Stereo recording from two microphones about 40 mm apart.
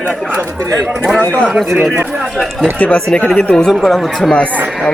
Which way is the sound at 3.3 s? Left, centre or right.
Left.